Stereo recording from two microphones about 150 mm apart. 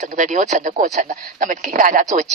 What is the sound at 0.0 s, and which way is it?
Speech, 55° right (ahead or behind).